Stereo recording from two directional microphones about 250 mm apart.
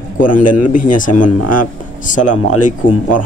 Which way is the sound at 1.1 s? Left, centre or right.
Left.